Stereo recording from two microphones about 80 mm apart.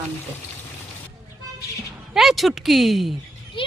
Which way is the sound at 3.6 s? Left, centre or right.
Left.